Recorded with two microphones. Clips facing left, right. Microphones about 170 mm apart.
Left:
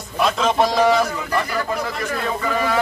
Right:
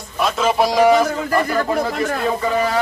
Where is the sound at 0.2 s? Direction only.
5° right (ahead or behind).